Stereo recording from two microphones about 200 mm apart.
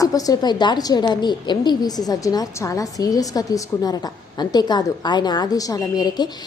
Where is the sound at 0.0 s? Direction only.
20° left (ahead or behind).